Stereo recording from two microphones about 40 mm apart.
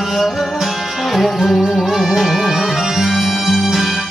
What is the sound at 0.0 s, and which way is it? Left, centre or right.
Music, centre.